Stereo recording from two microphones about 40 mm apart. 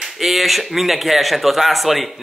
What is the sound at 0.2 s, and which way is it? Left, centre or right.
A man's voice, centre.